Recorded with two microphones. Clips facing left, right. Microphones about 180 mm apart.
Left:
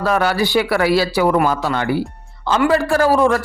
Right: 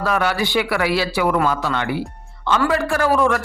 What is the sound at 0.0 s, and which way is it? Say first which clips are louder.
A man's voice: left 3 dB; 40° left (ahead or behind).